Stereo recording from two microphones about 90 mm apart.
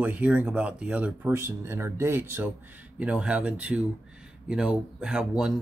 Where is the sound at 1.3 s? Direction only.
30° right (ahead or behind).